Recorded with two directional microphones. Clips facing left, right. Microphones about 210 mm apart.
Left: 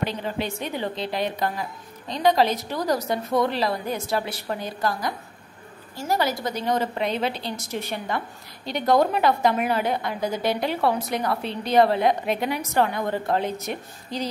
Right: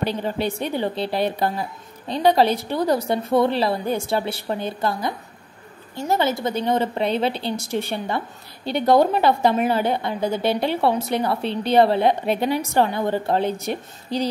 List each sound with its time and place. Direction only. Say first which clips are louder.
0.0 s a woman's voice: right 4 dB; 35° right (ahead or behind)